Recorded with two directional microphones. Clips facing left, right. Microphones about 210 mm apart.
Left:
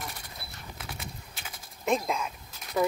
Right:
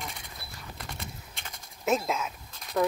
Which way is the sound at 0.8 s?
5° left (ahead or behind).